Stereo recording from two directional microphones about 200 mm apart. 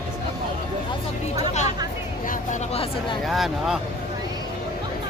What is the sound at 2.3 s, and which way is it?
Chatter, 35° left (ahead or behind).